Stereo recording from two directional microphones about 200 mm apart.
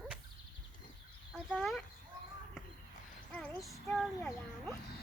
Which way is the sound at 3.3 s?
10° left (ahead or behind).